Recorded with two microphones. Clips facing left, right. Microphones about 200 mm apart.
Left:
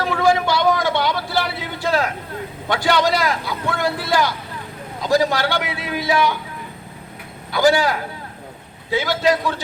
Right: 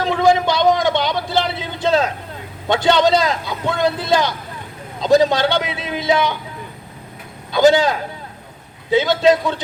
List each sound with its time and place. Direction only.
0.0 s vehicle: 20° right (ahead or behind)
2.6 s a man's voice: 20° right (ahead or behind)
7.5 s a man's voice: 20° right (ahead or behind)